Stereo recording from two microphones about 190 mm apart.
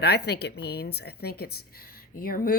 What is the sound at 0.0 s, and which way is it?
A woman's voice, 60° left (ahead or behind).